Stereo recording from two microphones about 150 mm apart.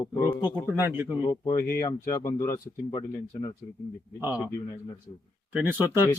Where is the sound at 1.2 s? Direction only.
20° left (ahead or behind).